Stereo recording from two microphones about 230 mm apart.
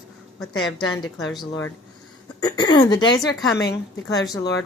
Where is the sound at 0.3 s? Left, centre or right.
Centre.